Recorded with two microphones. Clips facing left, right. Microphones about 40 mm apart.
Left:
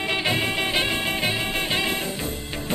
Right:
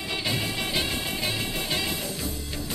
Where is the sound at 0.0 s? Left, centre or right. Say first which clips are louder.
Left 6 dB; left.